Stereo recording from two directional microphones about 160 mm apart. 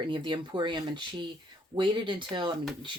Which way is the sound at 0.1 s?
30° right (ahead or behind).